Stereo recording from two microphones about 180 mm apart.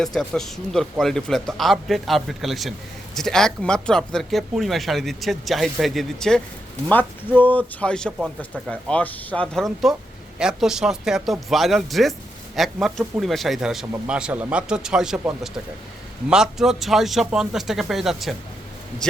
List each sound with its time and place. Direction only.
0.0 s speech: centre (ahead or behind)
16.3 s speech: 5° right (ahead or behind)